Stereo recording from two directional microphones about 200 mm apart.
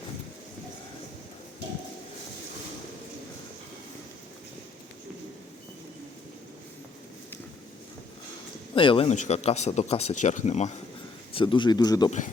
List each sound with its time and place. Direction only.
8.7 s speech: 25° left (ahead or behind)
11.3 s speech: 25° left (ahead or behind)